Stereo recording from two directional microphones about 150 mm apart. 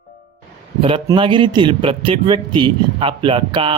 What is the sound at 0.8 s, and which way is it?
A man's voice, 35° right (ahead or behind).